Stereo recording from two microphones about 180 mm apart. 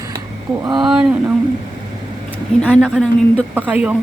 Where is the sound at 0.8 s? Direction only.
Centre (ahead or behind).